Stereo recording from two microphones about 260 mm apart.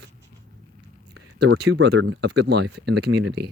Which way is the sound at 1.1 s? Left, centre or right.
Right.